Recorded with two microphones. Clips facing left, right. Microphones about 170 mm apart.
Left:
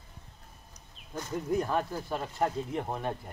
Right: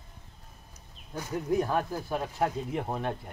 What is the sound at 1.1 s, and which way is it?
Speech, 5° right (ahead or behind).